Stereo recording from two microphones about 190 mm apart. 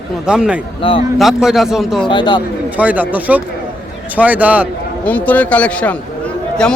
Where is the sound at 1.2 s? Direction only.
Centre (ahead or behind).